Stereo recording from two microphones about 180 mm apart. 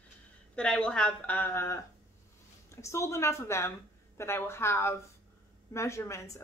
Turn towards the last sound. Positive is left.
turn(degrees=15)  # may be behind; listen again after turning